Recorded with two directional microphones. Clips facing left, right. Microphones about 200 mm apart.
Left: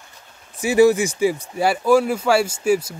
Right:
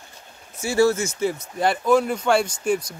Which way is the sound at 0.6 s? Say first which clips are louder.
Left 5 dB; 15° left (ahead or behind).